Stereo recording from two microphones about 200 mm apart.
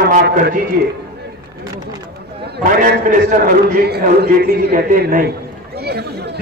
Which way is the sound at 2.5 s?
50° right (ahead or behind).